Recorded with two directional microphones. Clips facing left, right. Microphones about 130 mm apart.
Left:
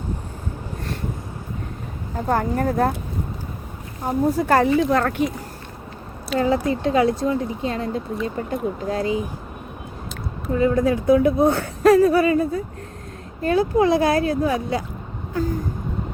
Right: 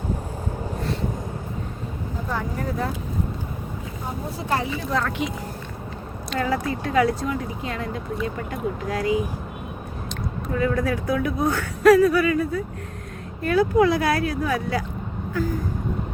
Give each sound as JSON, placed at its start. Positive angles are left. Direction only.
{"t": 2.2, "sound": "speech", "side_deg": 50}
{"t": 4.4, "sound": "speech", "side_deg": 50}
{"t": 6.4, "sound": "a woman's voice", "side_deg": 25}
{"t": 10.5, "sound": "a woman's voice", "side_deg": 25}